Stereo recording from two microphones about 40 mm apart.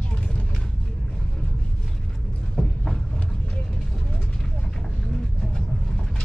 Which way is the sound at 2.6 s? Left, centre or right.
Centre.